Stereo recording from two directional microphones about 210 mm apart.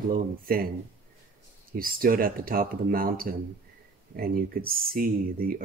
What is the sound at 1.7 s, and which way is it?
Speech, 40° right (ahead or behind).